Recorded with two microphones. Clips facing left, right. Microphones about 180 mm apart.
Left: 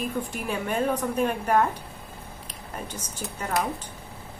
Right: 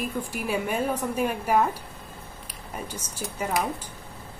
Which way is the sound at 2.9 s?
10° right (ahead or behind).